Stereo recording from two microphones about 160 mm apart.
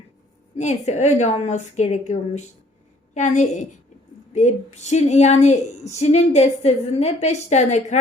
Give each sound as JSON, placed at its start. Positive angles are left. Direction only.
{"t": 0.5, "sound": "a woman's voice", "side_deg": 45}